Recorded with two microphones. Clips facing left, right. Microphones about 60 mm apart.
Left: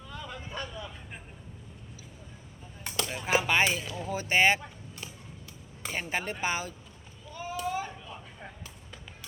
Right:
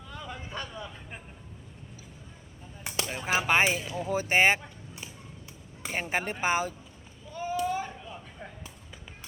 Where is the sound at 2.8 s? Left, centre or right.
Centre.